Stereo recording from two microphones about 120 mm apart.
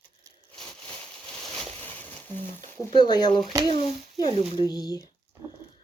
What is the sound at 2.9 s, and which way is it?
Speech, 35° left (ahead or behind).